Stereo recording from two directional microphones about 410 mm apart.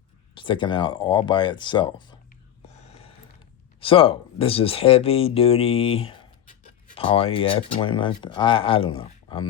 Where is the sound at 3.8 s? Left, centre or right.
Centre.